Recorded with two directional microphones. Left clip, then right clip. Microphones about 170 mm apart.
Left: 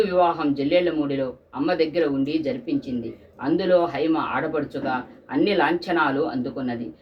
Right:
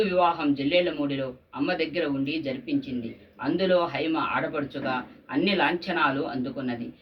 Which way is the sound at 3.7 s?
20° left (ahead or behind).